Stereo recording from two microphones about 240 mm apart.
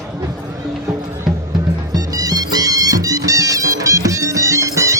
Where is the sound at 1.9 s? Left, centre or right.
Centre.